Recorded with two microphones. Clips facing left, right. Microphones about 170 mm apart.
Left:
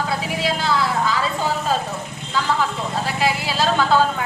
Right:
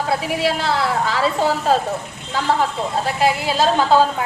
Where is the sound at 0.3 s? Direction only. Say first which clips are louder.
Left 1 dB; 65° right (ahead or behind).